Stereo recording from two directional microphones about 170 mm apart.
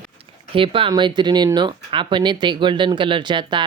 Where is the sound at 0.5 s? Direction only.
30° right (ahead or behind).